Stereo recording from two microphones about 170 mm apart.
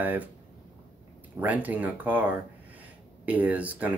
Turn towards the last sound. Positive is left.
turn(degrees=-10)  # may be behind; listen again after turning